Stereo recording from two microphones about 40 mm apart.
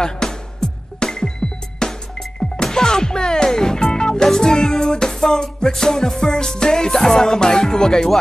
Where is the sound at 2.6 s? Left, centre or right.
Centre.